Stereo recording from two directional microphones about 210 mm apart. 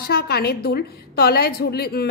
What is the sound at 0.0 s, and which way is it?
A woman's voice, 50° left (ahead or behind).